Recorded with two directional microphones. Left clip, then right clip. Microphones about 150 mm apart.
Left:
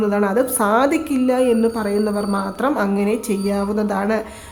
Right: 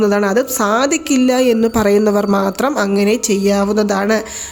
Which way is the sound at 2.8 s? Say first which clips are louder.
Right 5 dB; 25° right (ahead or behind).